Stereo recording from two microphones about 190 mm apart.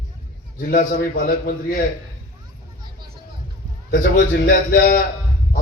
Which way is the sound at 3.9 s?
55° left (ahead or behind).